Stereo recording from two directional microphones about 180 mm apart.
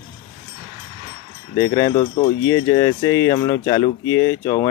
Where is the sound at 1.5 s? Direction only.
15° left (ahead or behind).